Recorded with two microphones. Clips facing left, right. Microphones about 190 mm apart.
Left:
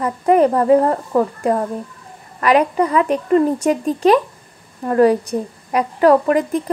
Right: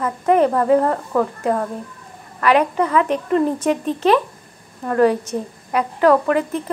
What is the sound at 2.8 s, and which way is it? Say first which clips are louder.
Speech: left 2 dB; 10° left (ahead or behind).